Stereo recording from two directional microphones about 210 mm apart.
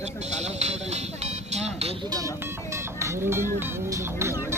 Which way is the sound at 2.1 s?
15° right (ahead or behind).